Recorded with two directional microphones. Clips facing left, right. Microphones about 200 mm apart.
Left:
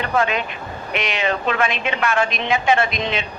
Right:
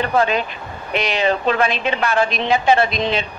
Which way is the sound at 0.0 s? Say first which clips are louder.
Right 3 dB; 35° right (ahead or behind).